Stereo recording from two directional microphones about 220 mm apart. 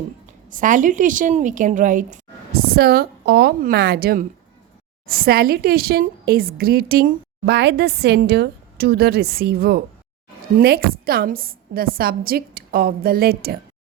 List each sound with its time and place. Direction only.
0.5 s a woman's voice: 35° right (ahead or behind)